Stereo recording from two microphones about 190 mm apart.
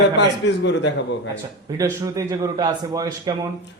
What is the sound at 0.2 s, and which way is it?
Speech, 65° left (ahead or behind).